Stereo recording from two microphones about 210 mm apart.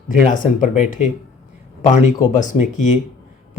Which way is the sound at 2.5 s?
35° left (ahead or behind).